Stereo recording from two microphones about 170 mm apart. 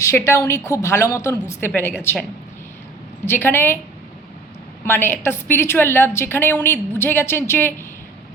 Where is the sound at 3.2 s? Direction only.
15° left (ahead or behind).